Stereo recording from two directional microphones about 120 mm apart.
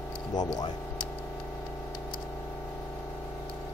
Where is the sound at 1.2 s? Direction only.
10° left (ahead or behind).